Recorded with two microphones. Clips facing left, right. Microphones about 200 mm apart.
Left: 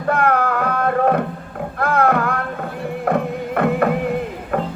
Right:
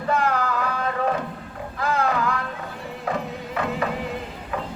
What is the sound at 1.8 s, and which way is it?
Music, 60° left (ahead or behind).